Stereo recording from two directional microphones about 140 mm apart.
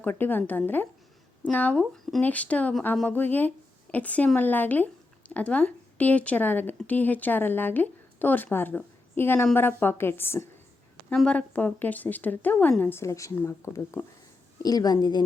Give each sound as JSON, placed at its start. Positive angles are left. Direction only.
{"t": 0.0, "sound": "a woman's voice", "side_deg": 15}
{"t": 1.8, "sound": "a woman's voice", "side_deg": 0}
{"t": 11.1, "sound": "a woman's voice", "side_deg": 5}